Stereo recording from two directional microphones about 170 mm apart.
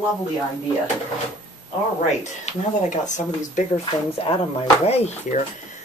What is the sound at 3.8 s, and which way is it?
Speech, 30° left (ahead or behind).